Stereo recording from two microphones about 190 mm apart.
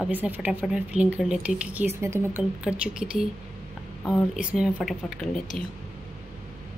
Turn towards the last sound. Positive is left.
turn(degrees=0)  # may be behind; listen again after turning